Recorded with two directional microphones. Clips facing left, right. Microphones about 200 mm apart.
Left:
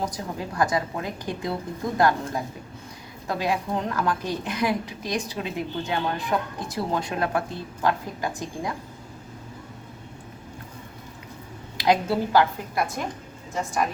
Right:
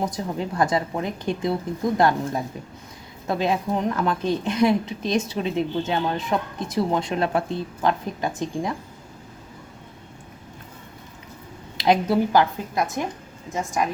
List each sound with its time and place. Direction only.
0.0 s a woman's voice: 25° right (ahead or behind)
11.8 s a woman's voice: 20° right (ahead or behind)